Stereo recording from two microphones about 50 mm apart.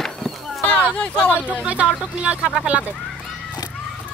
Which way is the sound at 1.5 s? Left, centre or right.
Right.